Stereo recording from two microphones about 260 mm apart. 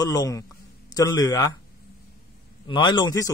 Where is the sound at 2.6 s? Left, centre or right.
Centre.